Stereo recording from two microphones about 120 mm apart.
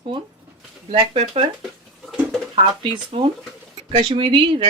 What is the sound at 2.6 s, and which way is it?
Speech, 45° right (ahead or behind).